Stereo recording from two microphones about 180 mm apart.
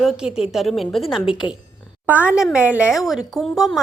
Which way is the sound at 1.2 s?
25° left (ahead or behind).